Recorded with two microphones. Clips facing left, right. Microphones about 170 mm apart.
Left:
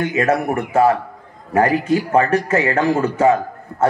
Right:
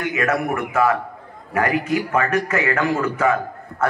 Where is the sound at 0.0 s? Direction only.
30° left (ahead or behind).